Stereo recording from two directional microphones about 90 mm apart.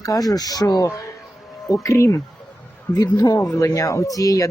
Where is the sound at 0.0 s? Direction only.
45° left (ahead or behind).